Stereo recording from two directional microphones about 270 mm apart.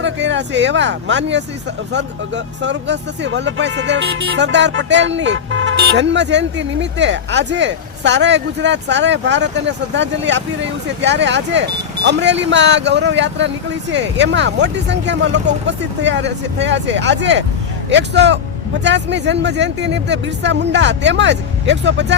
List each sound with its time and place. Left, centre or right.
0.0 s speech: right